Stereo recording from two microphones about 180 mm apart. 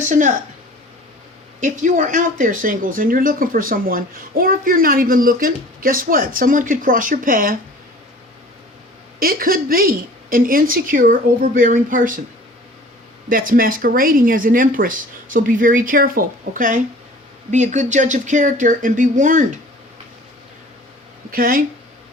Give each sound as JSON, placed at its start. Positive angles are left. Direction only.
{"t": 0.1, "sound": "speech", "side_deg": -45}
{"t": 1.6, "sound": "speech", "side_deg": -45}
{"t": 9.1, "sound": "speech", "side_deg": -55}
{"t": 13.2, "sound": "speech", "side_deg": -50}
{"t": 21.2, "sound": "speech", "side_deg": -50}